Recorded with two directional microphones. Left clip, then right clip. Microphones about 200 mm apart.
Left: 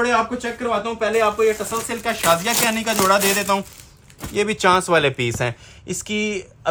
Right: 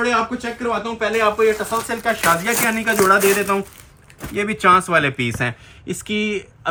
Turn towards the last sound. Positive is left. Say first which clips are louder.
# even
turn(degrees=50)  # may be behind; listen again after turning